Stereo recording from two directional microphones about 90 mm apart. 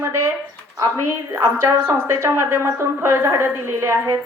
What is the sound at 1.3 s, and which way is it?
A woman's voice, 30° right (ahead or behind).